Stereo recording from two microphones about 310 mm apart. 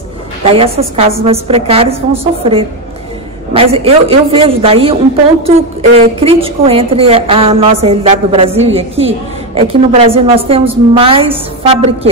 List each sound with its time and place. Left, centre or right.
0.5 s a woman's voice: centre